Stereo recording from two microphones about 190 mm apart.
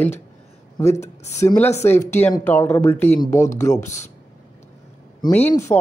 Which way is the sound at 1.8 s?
10° left (ahead or behind).